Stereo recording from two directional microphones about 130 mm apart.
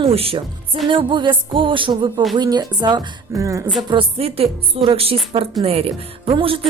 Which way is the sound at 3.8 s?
45° right (ahead or behind).